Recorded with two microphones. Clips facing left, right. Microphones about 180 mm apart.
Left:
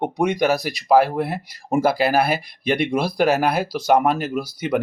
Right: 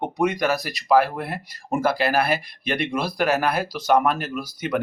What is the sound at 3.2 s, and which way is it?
Speech, 30° left (ahead or behind).